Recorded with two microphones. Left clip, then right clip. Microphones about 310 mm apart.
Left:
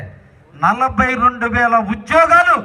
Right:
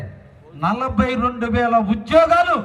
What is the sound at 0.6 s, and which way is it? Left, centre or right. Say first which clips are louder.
A man's voice: left 6 dB; centre.